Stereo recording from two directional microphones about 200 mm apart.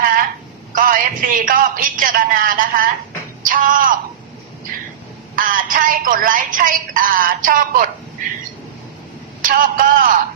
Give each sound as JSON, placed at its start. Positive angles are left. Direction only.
{"t": 0.7, "sound": "a man's voice", "side_deg": -45}
{"t": 5.5, "sound": "a woman's voice", "side_deg": -45}
{"t": 9.4, "sound": "a woman's voice", "side_deg": -45}